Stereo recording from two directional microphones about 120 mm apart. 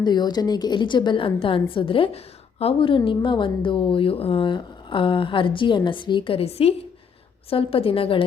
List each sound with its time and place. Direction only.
0.0 s a woman's voice: 35° left (ahead or behind)